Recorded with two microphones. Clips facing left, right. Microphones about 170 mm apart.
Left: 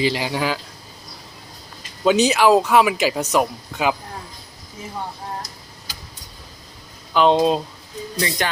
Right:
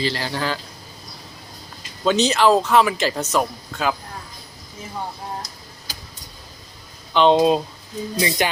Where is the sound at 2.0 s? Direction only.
10° left (ahead or behind).